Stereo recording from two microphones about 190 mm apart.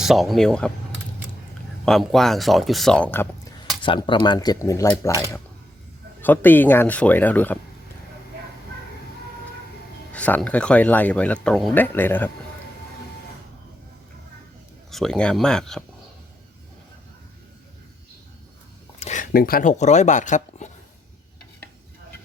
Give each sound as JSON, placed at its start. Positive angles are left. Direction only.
{"t": 0.0, "sound": "speech", "side_deg": 0}
{"t": 1.8, "sound": "speech", "side_deg": 0}
{"t": 3.8, "sound": "speech", "side_deg": 25}
{"t": 6.2, "sound": "speech", "side_deg": 10}
{"t": 10.1, "sound": "speech", "side_deg": 5}
{"t": 14.8, "sound": "speech", "side_deg": 0}
{"t": 18.9, "sound": "speech", "side_deg": 40}